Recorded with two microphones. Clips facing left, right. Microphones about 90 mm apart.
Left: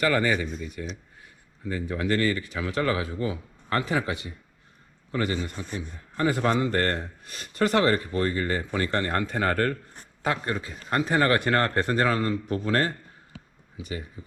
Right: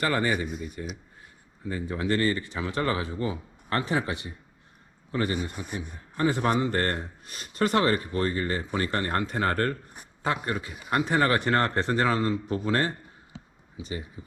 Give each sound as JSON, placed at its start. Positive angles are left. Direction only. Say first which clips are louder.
{"t": 0.0, "sound": "a man's voice", "louder": "left 3 dB", "side_deg": -30}
{"t": 0.3, "sound": "speech", "louder": "left 1 dB", "side_deg": -5}
{"t": 1.9, "sound": "a man's voice", "louder": "left 1 dB", "side_deg": -25}